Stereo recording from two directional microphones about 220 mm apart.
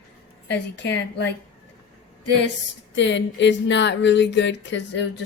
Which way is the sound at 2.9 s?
55° left (ahead or behind).